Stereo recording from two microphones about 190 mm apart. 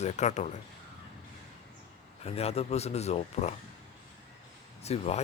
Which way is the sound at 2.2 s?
30° left (ahead or behind).